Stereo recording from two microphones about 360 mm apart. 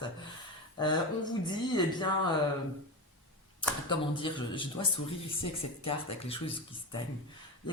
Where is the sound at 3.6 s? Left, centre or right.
Centre.